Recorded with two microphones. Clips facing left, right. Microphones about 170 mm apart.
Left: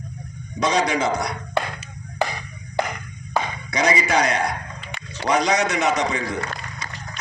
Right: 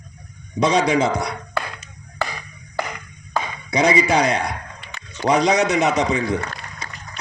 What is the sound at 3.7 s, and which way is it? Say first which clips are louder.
A man's voice: right 3 dB; 30° right (ahead or behind).